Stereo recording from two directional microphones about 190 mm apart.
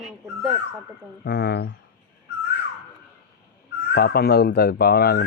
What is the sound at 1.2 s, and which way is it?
Speech, 60° left (ahead or behind).